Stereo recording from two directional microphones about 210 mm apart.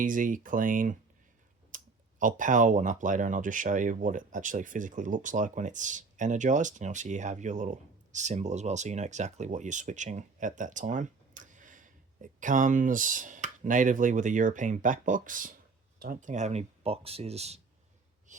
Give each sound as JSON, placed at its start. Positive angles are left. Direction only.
{"t": 0.0, "sound": "speech", "side_deg": -40}
{"t": 18.3, "sound": "owl", "side_deg": -35}